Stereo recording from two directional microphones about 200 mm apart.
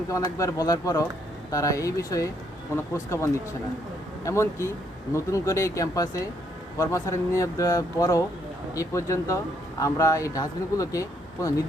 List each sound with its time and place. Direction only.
0.1 s speech: 15° left (ahead or behind)